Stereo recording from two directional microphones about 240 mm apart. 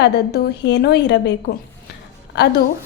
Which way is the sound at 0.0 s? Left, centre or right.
Left.